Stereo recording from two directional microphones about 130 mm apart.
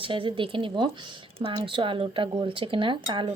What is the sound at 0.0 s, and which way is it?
Speech, 40° right (ahead or behind).